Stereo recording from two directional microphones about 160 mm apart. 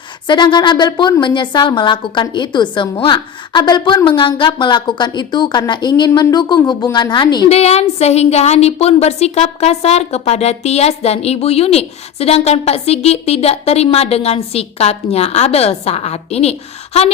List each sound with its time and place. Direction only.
0.3 s a woman's voice: 30° left (ahead or behind)
7.5 s a woman's voice: 40° left (ahead or behind)